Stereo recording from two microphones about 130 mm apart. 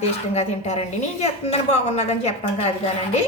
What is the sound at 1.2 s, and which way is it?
A woman's voice, 55° left (ahead or behind).